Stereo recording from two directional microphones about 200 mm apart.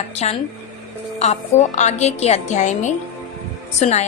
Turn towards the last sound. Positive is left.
turn(degrees=35)  # may be behind; listen again after turning